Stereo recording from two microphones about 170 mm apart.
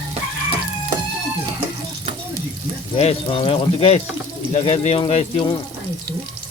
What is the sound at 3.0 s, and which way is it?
Speech, 35° left (ahead or behind).